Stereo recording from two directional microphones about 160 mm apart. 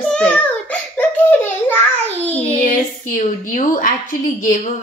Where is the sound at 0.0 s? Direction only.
5° left (ahead or behind).